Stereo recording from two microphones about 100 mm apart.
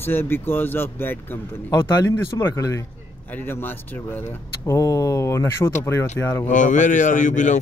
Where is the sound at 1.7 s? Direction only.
35° left (ahead or behind).